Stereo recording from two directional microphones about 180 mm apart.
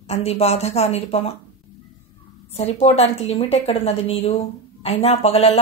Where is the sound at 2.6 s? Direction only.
35° left (ahead or behind).